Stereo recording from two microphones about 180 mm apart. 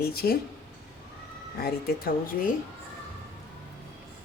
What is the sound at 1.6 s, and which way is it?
Speech, 55° left (ahead or behind).